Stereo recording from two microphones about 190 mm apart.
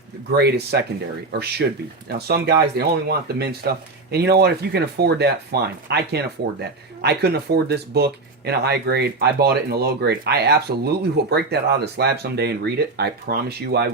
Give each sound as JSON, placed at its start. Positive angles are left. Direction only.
{"t": 0.3, "sound": "speech", "side_deg": -60}